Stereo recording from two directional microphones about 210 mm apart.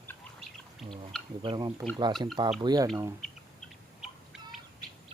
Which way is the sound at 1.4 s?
25° right (ahead or behind).